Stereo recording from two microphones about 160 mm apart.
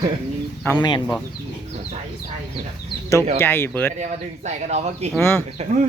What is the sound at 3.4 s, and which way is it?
Speech, 15° left (ahead or behind).